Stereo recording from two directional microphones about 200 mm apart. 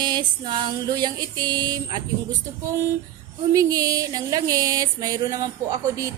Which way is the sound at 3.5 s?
15° right (ahead or behind).